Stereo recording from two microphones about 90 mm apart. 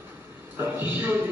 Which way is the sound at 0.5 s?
25° right (ahead or behind).